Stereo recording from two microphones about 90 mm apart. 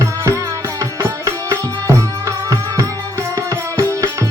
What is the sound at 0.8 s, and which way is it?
Music, 35° right (ahead or behind).